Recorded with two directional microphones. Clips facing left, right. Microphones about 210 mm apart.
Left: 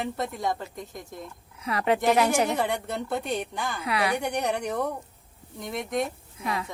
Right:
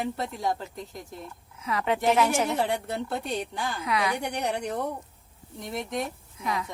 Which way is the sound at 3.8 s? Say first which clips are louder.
Left 1 dB; 60° left (ahead or behind).